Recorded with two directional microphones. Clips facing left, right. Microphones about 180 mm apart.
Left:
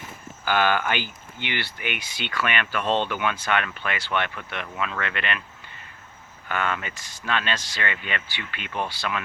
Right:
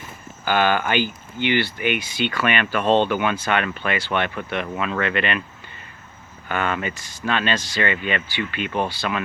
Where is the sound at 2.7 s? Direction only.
35° right (ahead or behind).